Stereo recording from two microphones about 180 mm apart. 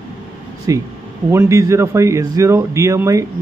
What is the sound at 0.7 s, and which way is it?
Speech, 20° right (ahead or behind).